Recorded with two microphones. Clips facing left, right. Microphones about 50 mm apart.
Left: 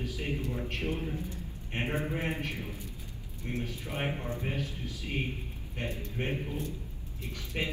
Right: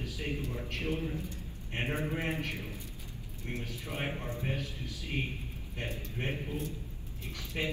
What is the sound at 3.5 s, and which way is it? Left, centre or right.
A man's voice, left.